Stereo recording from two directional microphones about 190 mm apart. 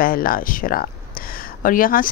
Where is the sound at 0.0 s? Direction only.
50° left (ahead or behind).